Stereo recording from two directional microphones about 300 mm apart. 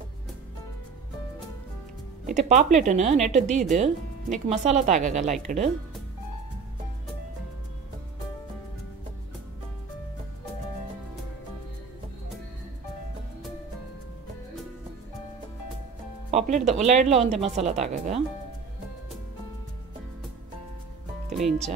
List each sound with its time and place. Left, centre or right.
2.2 s speech: right
16.3 s speech: right